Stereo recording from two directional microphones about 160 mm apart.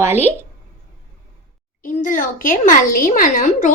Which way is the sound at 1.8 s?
55° left (ahead or behind).